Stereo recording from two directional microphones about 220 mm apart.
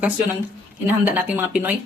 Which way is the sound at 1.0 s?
5° right (ahead or behind).